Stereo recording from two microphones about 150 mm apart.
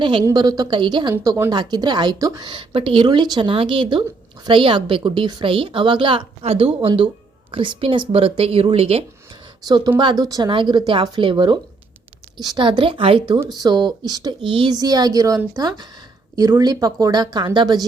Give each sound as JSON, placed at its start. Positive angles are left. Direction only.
{"t": 0.0, "sound": "a woman's voice", "side_deg": -35}
{"t": 1.1, "sound": "speech", "side_deg": -20}
{"t": 2.5, "sound": "a woman's voice", "side_deg": -35}
{"t": 9.6, "sound": "a woman's voice", "side_deg": -25}